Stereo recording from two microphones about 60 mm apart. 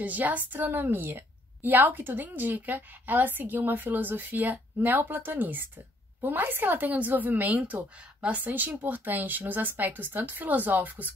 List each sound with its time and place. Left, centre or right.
0.0 s a woman's voice: right